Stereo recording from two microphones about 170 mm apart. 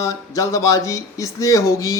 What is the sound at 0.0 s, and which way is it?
Speech, 20° left (ahead or behind).